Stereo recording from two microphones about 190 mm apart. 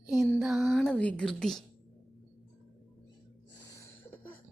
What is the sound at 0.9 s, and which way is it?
Speech, 5° left (ahead or behind).